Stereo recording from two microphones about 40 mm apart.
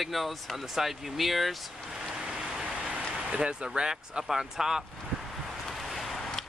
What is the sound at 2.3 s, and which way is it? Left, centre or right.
Vehicle, centre.